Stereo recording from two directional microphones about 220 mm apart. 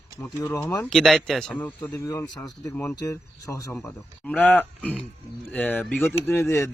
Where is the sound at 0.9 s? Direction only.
Centre (ahead or behind).